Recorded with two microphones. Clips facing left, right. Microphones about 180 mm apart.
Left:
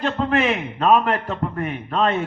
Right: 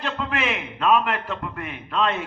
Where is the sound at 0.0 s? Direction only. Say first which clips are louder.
Left 7 dB; 40° left (ahead or behind).